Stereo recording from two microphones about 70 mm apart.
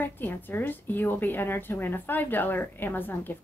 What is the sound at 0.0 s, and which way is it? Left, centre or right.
A woman's voice, left.